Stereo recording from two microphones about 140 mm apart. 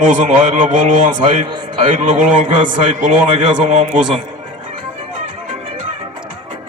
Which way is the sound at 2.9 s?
60° right (ahead or behind).